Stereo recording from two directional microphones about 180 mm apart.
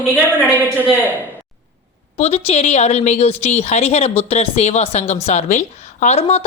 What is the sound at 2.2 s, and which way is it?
A woman's voice, 35° left (ahead or behind).